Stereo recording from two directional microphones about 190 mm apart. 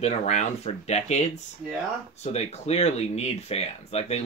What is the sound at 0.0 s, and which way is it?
Speech, 35° left (ahead or behind).